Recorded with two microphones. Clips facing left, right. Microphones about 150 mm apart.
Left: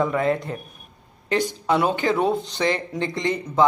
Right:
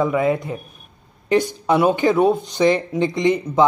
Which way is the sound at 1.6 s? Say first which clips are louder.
Right 4 dB; 15° right (ahead or behind).